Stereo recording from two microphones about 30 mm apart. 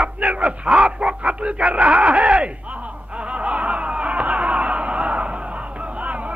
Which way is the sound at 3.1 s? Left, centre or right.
Right.